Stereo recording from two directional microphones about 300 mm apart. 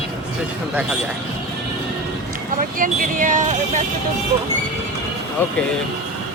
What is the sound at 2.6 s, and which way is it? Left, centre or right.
Speech, right.